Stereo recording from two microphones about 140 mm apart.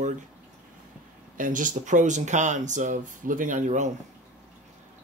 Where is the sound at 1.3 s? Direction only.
70° right (ahead or behind).